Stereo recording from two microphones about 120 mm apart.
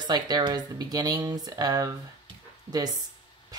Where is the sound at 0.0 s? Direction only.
35° right (ahead or behind).